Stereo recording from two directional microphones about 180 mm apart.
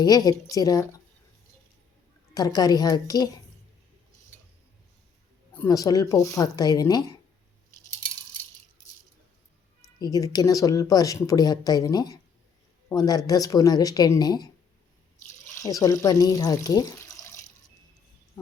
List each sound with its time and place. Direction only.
0.3 s speech: 20° left (ahead or behind)
2.3 s speech: 20° left (ahead or behind)
5.6 s speech: 20° left (ahead or behind)
10.0 s speech: 20° left (ahead or behind)
15.5 s speech: 20° left (ahead or behind)